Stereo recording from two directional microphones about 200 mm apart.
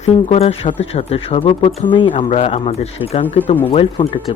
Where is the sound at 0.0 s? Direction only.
30° left (ahead or behind).